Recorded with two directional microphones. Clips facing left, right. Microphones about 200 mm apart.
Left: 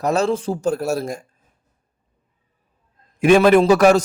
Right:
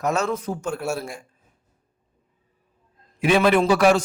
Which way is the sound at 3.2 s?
45° left (ahead or behind).